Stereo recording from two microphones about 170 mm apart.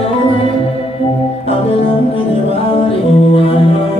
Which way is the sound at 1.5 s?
35° left (ahead or behind).